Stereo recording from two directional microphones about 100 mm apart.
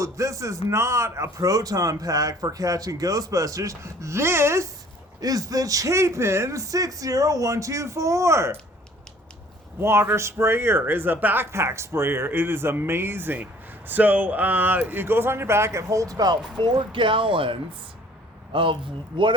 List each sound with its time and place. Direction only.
0.0 s speech: 35° right (ahead or behind)
5.2 s speech: 40° right (ahead or behind)
9.8 s speech: 25° right (ahead or behind); by 16.4 s 40° right (ahead or behind)
16.6 s speech: 50° right (ahead or behind)